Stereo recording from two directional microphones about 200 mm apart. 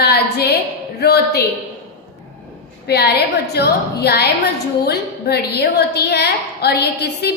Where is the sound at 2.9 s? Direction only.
55° left (ahead or behind).